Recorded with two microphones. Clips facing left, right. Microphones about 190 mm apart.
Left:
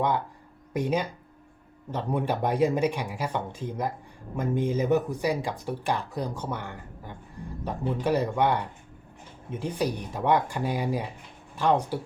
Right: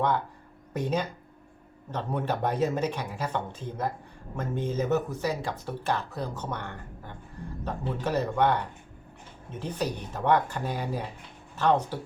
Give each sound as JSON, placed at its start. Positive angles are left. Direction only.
{"t": 0.7, "sound": "speech", "side_deg": 10}